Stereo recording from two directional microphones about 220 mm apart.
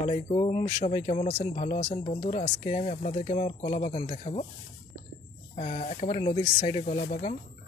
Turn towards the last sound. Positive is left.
turn(degrees=35)  # may be behind; listen again after turning